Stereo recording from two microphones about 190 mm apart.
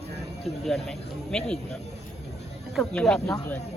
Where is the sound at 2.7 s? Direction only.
5° left (ahead or behind).